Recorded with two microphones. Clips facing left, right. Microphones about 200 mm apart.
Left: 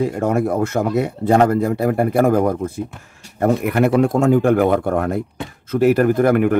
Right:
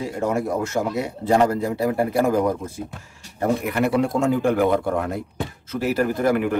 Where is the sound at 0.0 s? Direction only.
55° left (ahead or behind).